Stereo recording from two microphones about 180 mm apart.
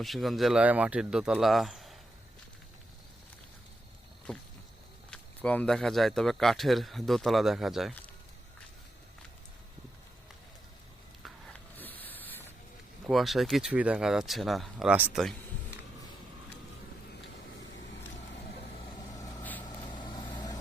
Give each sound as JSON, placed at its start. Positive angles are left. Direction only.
{"t": 0.0, "sound": "speech", "side_deg": 0}
{"t": 4.3, "sound": "a sound", "side_deg": 5}
{"t": 5.1, "sound": "speech", "side_deg": 10}
{"t": 11.2, "sound": "a sound", "side_deg": 5}
{"t": 13.1, "sound": "speech", "side_deg": 0}
{"t": 19.1, "sound": "vehicle", "side_deg": 20}